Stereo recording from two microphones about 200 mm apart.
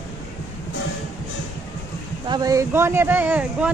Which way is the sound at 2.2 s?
20° right (ahead or behind).